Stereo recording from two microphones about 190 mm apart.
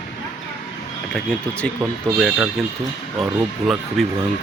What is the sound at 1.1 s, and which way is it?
Speech, 5° left (ahead or behind).